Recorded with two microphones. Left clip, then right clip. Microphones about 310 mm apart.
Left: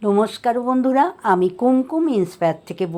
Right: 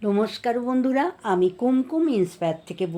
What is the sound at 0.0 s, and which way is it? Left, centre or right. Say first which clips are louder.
A woman's voice: left 6 dB; centre.